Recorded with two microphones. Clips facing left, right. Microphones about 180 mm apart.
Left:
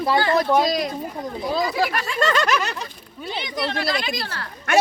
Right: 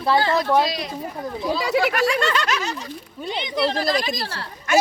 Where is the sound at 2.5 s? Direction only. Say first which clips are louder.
Left 2 dB; 65° left (ahead or behind).